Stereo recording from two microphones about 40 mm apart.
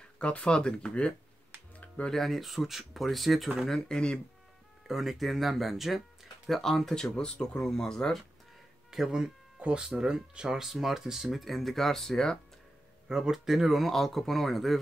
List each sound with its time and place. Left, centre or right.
0.2 s speech: left
2.0 s speech: centre
3.9 s speech: left
4.8 s speech: centre
6.6 s speech: centre
8.9 s speech: centre
9.6 s speech: right
9.8 s speech: centre
11.3 s speech: centre
13.1 s speech: centre
13.8 s speech: centre